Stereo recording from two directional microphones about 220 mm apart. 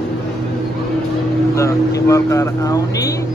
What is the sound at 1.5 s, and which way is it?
Speech, 15° left (ahead or behind).